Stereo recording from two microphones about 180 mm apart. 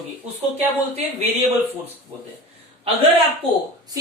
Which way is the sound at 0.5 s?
35° right (ahead or behind).